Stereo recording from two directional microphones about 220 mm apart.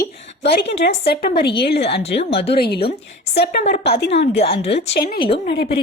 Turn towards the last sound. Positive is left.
turn(degrees=45)  # may be behind; listen again after turning